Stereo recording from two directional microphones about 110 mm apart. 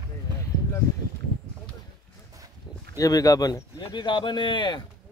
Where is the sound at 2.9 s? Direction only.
30° left (ahead or behind).